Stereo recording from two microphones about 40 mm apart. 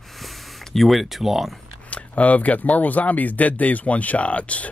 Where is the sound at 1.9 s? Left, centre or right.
Left.